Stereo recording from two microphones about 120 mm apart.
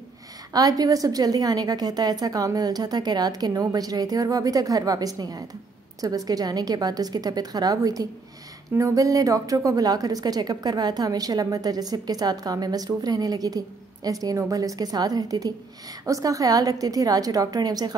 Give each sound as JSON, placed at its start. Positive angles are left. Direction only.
{"t": 0.5, "sound": "a woman's voice", "side_deg": -30}